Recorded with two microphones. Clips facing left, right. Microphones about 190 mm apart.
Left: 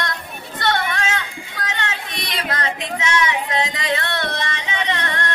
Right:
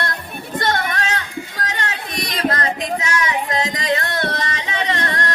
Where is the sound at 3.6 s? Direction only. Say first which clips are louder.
Right 2 dB; 40° right (ahead or behind).